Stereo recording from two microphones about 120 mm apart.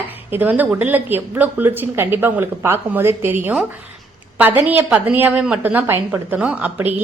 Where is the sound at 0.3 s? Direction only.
15° right (ahead or behind).